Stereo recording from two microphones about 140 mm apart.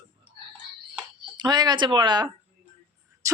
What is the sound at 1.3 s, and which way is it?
A woman's voice, 30° right (ahead or behind).